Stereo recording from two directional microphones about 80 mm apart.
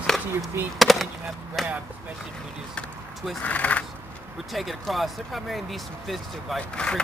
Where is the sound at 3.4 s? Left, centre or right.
Centre.